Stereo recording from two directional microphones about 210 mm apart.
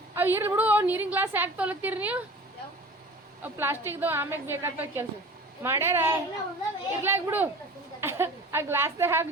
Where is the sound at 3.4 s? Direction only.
10° right (ahead or behind).